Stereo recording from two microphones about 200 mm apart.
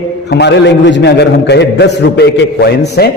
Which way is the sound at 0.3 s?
60° left (ahead or behind).